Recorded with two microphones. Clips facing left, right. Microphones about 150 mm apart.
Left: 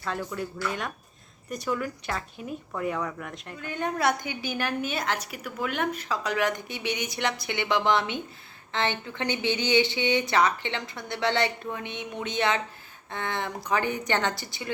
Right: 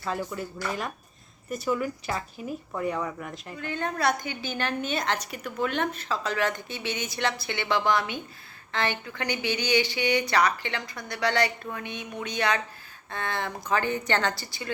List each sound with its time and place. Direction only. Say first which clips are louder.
0.0 s a woman's voice: even; 5° right (ahead or behind)
3.7 s a woman's voice: left 1 dB; 15° left (ahead or behind)